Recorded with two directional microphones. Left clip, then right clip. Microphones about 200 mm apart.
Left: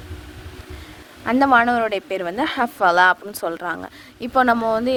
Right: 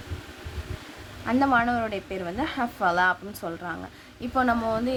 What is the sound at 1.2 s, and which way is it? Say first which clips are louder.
A woman's voice: left 7 dB; 50° left (ahead or behind).